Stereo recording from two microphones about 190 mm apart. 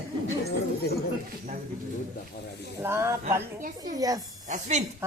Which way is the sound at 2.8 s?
15° right (ahead or behind).